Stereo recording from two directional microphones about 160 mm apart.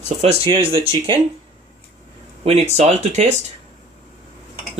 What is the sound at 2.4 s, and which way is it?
Speech, 40° right (ahead or behind).